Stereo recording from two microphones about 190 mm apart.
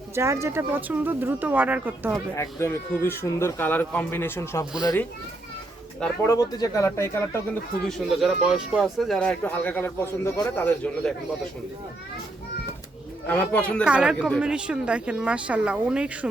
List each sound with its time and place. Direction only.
0.1 s speech: 15° right (ahead or behind)
2.3 s speech: 15° left (ahead or behind)
6.2 s speech: 15° left (ahead or behind)
7.9 s speech: centre (ahead or behind)
13.2 s speech: 10° left (ahead or behind)
13.8 s speech: 5° right (ahead or behind)